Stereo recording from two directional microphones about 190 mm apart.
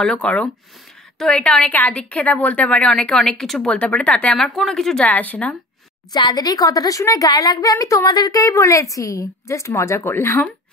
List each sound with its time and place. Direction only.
0.0 s a woman's voice: 5° left (ahead or behind)
6.1 s a woman's voice: 20° left (ahead or behind)